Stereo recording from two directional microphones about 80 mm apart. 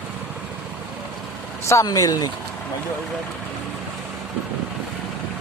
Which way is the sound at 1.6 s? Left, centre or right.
Left.